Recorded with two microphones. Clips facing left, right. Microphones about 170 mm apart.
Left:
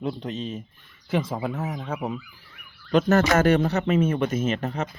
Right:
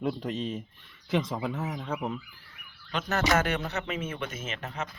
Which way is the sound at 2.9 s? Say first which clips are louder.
Left 8 dB; 45° left (ahead or behind).